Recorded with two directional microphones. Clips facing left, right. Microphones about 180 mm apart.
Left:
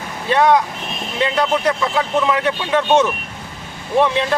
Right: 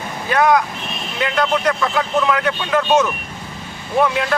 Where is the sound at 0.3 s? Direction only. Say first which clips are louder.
Left 1 dB; 25° left (ahead or behind).